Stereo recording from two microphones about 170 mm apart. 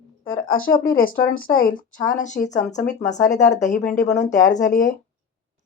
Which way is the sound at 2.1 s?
50° left (ahead or behind).